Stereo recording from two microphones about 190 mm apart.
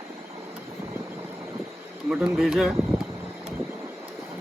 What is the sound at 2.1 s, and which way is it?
Speech, 5° right (ahead or behind).